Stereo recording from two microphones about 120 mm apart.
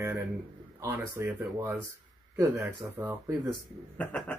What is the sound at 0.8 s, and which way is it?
Speech, 20° right (ahead or behind).